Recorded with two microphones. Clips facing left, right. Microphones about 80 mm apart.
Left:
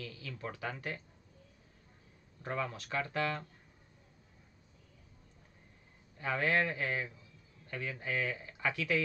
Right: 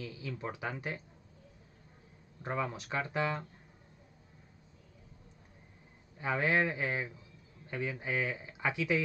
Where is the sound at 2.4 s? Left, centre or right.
Centre.